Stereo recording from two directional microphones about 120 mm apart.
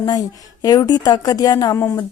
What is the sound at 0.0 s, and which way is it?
Speech, 30° left (ahead or behind).